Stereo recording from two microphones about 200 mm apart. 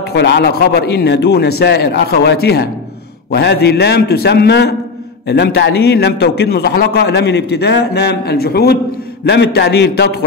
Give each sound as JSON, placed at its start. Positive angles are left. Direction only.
{"t": 0.1, "sound": "a man's voice", "side_deg": 60}